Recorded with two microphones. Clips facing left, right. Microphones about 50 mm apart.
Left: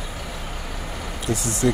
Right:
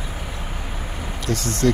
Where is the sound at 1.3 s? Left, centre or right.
Right.